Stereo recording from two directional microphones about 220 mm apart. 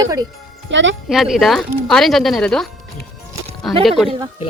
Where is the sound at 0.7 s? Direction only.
55° right (ahead or behind).